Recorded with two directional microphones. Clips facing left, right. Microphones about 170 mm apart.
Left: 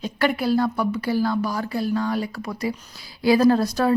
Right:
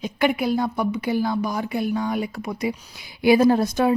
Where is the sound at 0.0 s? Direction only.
15° right (ahead or behind).